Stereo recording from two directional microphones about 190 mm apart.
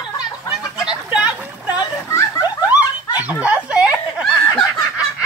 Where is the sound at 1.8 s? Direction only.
15° left (ahead or behind).